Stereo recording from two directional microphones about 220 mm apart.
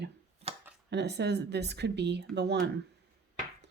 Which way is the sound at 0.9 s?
50° right (ahead or behind).